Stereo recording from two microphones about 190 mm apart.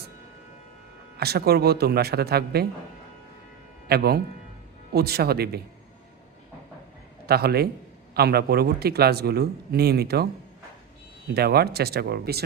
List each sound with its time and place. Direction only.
1.2 s a man's voice: 55° right (ahead or behind)
3.8 s a man's voice: 55° right (ahead or behind)
7.3 s a man's voice: 55° right (ahead or behind)
11.3 s a man's voice: 55° right (ahead or behind)